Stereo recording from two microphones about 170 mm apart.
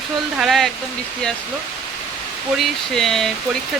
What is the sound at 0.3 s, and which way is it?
Speech, centre (ahead or behind).